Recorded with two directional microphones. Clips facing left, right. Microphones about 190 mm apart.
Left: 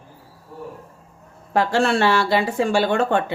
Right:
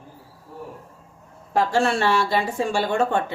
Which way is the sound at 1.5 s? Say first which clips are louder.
Left 2 dB; 75° left (ahead or behind).